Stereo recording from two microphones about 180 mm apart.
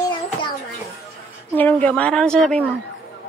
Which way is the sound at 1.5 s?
5° left (ahead or behind).